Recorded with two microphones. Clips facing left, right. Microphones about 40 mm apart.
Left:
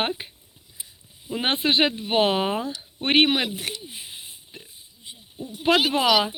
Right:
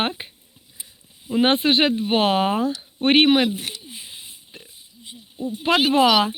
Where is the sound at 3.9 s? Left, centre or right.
Left.